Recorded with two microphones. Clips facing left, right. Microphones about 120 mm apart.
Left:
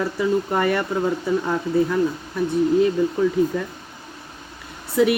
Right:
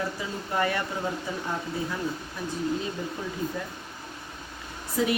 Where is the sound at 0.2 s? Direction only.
60° left (ahead or behind).